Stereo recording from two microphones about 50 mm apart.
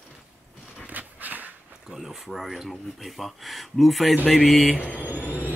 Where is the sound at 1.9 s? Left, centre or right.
Centre.